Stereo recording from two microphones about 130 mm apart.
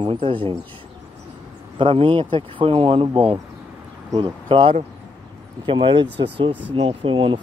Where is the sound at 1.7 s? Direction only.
40° right (ahead or behind).